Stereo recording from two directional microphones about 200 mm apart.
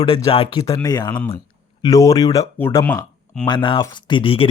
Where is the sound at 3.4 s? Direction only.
20° left (ahead or behind).